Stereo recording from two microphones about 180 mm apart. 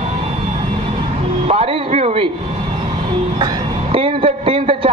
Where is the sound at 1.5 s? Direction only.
35° right (ahead or behind).